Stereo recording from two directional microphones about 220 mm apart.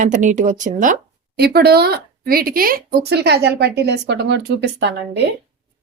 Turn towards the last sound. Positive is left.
turn(degrees=-50)  # may be behind; listen again after turning